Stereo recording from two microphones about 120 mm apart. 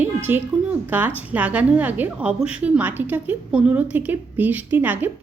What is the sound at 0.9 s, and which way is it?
A woman's voice, 15° right (ahead or behind).